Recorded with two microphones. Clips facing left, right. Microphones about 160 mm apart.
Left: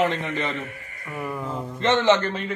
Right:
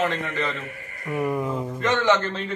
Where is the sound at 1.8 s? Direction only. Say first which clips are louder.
Left 3 dB; 25° left (ahead or behind).